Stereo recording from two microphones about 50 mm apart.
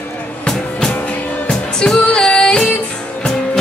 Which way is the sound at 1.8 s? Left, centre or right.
Centre.